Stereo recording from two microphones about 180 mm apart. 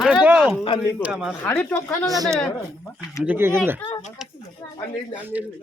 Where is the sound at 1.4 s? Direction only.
10° left (ahead or behind).